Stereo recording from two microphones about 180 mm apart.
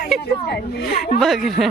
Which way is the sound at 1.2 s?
Centre (ahead or behind).